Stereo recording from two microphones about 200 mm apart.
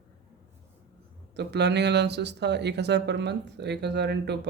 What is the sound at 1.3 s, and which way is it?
Speech, 60° right (ahead or behind).